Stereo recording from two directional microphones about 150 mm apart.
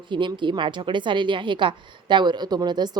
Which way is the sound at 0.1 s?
30° right (ahead or behind).